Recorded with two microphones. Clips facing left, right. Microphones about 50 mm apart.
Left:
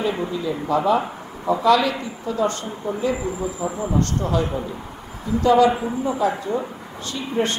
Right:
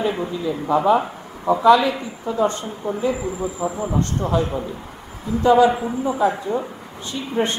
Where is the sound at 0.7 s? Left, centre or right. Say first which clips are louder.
Right 3 dB; centre.